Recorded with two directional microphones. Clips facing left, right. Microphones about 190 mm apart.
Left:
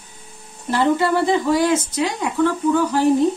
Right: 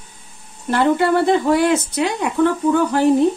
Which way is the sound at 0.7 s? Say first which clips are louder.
Right 2 dB; 60° right (ahead or behind).